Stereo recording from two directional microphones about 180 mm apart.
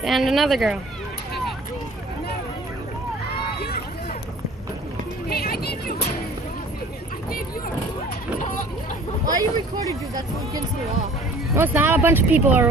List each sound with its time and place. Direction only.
0.0 s speech: centre (ahead or behind)
5.3 s speech: 60° left (ahead or behind)
9.2 s speech: 20° right (ahead or behind)
11.5 s speech: 10° right (ahead or behind)